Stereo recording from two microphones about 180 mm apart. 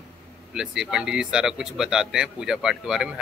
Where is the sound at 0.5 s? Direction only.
Centre (ahead or behind).